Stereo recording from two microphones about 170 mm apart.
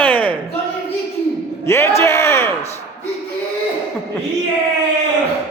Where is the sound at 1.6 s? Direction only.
15° left (ahead or behind).